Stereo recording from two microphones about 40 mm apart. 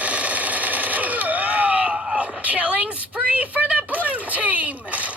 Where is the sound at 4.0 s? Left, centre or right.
Right.